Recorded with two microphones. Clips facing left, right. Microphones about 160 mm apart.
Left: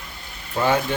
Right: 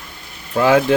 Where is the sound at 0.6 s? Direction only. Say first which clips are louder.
Right 7 dB; 90° right.